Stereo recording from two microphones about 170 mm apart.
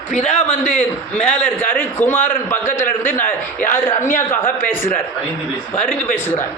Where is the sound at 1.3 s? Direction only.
10° left (ahead or behind).